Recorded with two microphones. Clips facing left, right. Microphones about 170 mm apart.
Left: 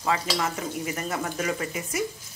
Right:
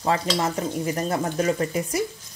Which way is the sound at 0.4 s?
35° right (ahead or behind).